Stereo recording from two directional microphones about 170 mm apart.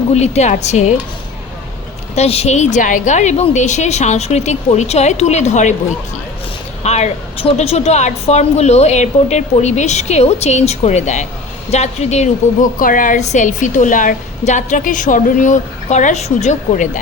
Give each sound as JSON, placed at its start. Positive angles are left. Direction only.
{"t": 0.1, "sound": "a woman's voice", "side_deg": 40}
{"t": 2.1, "sound": "a woman's voice", "side_deg": 40}
{"t": 6.8, "sound": "a woman's voice", "side_deg": 40}